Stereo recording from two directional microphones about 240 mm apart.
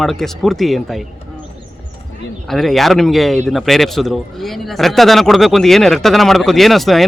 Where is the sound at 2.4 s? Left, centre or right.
Centre.